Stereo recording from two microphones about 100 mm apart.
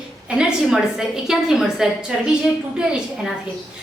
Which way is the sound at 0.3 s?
10° right (ahead or behind).